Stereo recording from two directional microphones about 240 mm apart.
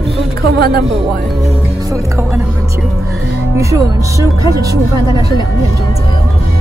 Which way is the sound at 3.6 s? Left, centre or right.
Centre.